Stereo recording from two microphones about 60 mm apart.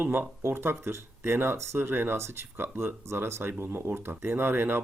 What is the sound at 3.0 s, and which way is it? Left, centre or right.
Speech, right.